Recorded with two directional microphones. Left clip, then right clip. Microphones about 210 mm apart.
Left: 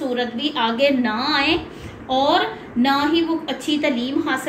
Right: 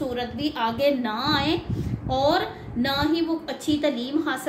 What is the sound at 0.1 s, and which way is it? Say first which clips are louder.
A woman's voice: left 6 dB; 35° right (ahead or behind).